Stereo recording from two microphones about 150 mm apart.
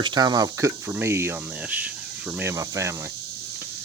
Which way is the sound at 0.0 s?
30° right (ahead or behind).